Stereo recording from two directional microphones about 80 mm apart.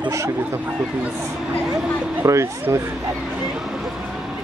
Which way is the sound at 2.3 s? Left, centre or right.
Right.